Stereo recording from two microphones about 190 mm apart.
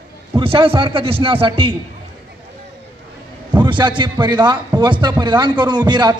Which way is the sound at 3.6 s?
25° right (ahead or behind).